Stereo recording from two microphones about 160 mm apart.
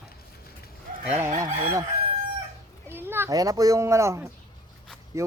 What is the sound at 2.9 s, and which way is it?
A child's voice, 15° right (ahead or behind).